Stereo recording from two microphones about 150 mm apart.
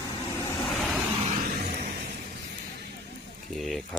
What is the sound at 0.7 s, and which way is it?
Vehicle, centre (ahead or behind).